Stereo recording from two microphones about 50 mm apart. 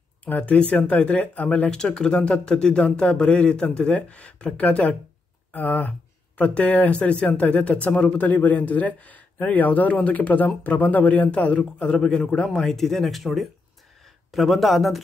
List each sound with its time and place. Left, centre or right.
0.2 s speech: left
1.7 s speech: centre; by 11.2 s left
11.3 s speech: left
12.5 s speech: centre